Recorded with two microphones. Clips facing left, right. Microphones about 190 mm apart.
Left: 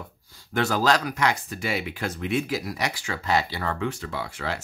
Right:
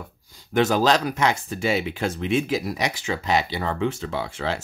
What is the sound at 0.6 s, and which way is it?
Speech, 20° right (ahead or behind).